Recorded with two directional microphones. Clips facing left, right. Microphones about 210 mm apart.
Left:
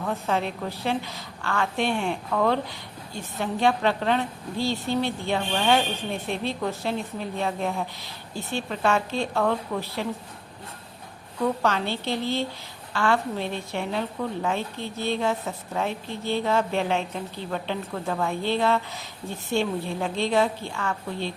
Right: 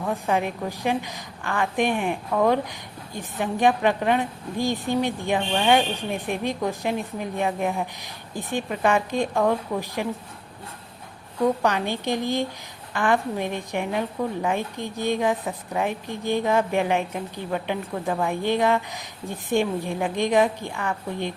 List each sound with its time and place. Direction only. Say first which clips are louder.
0.0 s a woman's voice: right 2 dB; 15° right (ahead or behind)
11.4 s a woman's voice: right 2 dB; 15° right (ahead or behind)